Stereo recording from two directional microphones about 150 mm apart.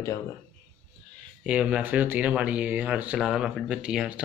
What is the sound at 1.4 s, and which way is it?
Speech, 10° right (ahead or behind).